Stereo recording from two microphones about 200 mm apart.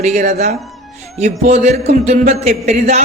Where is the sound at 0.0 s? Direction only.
35° right (ahead or behind).